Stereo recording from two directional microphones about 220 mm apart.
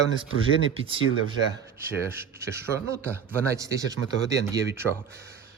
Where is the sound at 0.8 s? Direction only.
20° right (ahead or behind).